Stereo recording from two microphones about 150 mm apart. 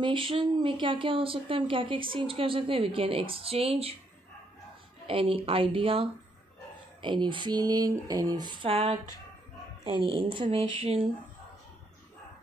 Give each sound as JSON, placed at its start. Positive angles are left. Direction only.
{"t": 0.0, "sound": "speech", "side_deg": -35}
{"t": 5.0, "sound": "speech", "side_deg": -40}